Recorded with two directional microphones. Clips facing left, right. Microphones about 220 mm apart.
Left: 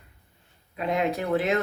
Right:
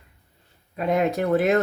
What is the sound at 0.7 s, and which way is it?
Speech, 45° right (ahead or behind).